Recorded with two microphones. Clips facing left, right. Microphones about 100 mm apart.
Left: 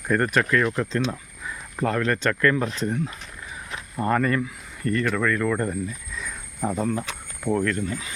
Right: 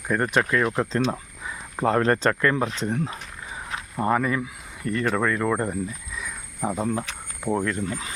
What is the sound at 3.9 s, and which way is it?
Speech, 10° right (ahead or behind).